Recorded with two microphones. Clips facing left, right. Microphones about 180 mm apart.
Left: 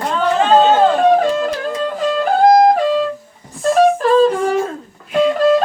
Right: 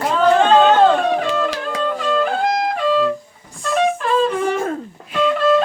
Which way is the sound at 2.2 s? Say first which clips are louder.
Left 9 dB; 40° left (ahead or behind).